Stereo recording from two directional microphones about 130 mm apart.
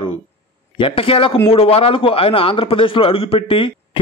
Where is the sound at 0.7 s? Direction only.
45° left (ahead or behind).